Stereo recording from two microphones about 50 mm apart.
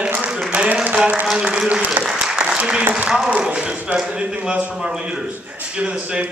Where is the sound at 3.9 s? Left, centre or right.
Right.